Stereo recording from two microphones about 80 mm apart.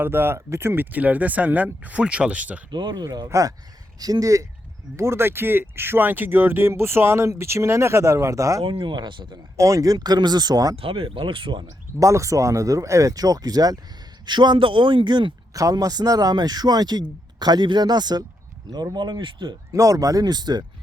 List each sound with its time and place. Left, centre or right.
0.0 s speech: right
2.6 s speech: right
2.9 s speech: right
4.9 s speech: right
8.8 s speech: right
9.6 s speech: right
11.0 s speech: right
11.9 s speech: right
14.3 s a man's voice: right
15.5 s speech: right
19.2 s speech: right
19.7 s speech: right